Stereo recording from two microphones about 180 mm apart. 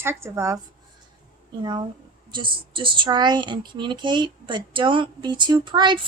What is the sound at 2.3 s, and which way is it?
Speech, 25° right (ahead or behind).